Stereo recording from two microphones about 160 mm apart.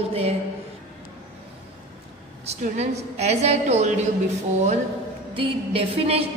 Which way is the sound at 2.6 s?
45° right (ahead or behind).